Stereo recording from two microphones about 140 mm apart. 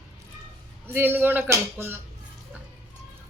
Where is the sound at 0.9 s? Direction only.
15° right (ahead or behind).